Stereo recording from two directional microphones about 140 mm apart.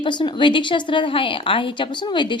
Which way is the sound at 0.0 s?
35° left (ahead or behind).